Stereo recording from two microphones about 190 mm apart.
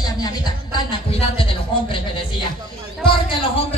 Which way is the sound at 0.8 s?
30° left (ahead or behind).